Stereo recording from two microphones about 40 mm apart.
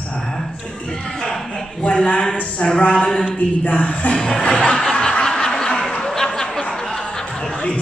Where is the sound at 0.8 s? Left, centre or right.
Centre.